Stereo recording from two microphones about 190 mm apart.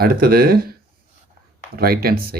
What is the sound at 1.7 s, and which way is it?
Speech, 50° right (ahead or behind).